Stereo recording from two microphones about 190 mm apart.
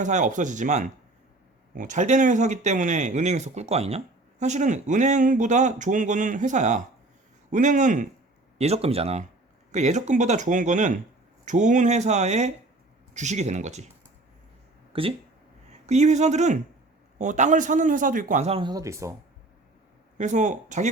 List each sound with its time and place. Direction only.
0.0 s speech: 40° right (ahead or behind)
14.9 s speech: 30° right (ahead or behind)
20.1 s speech: 40° right (ahead or behind)